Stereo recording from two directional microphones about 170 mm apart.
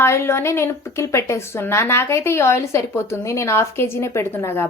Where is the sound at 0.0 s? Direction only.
15° left (ahead or behind).